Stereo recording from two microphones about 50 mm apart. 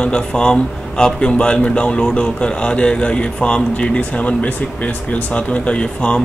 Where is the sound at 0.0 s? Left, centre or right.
Centre.